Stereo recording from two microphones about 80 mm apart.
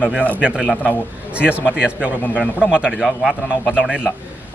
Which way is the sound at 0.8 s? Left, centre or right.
Centre.